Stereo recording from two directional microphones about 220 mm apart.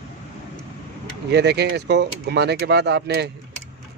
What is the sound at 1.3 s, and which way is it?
Speech, 50° right (ahead or behind).